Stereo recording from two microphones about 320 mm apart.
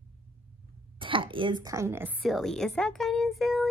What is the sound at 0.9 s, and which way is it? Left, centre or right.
A woman's voice, centre.